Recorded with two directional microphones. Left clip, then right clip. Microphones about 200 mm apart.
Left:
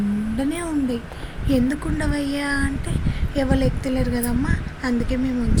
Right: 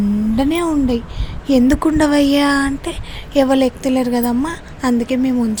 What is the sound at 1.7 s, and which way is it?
A woman's voice, 45° right (ahead or behind).